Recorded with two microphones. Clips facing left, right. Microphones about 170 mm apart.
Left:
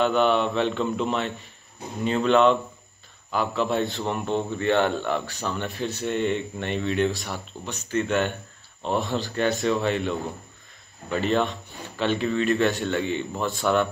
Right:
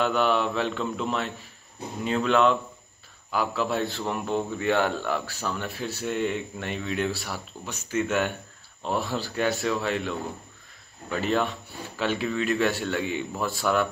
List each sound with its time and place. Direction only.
0.0 s a man's voice: 5° right (ahead or behind)
7.1 s speech: 20° left (ahead or behind)
7.9 s a man's voice: 5° right (ahead or behind)